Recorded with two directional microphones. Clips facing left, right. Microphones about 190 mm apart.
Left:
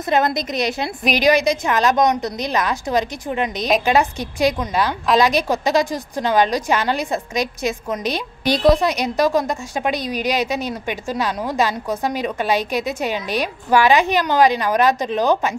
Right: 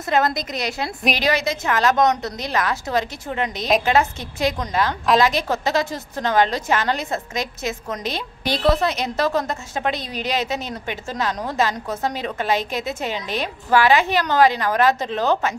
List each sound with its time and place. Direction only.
0.0 s a woman's voice: 20° left (ahead or behind)